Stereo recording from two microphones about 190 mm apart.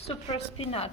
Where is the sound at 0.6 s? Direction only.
30° left (ahead or behind).